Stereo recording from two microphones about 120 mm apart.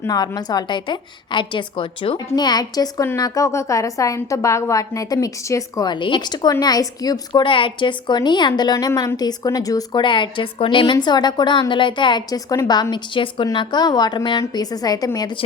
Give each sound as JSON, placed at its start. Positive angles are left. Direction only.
{"t": 0.1, "sound": "a woman's voice", "side_deg": 35}
{"t": 7.4, "sound": "a woman's voice", "side_deg": 45}